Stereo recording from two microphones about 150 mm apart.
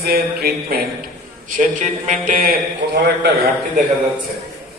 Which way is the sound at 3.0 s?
90° right.